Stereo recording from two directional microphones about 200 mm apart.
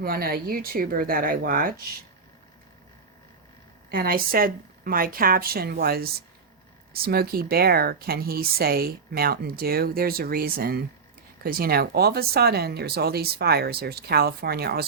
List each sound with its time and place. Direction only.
0.0 s speech: 45° right (ahead or behind)
3.9 s speech: 45° right (ahead or behind)